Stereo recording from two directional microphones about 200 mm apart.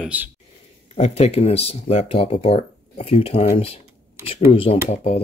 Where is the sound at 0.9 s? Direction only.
35° left (ahead or behind).